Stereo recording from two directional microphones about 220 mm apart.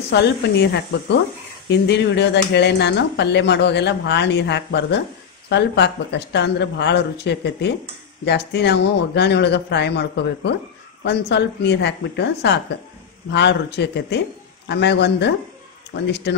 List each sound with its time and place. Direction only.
0.1 s speech: 50° left (ahead or behind)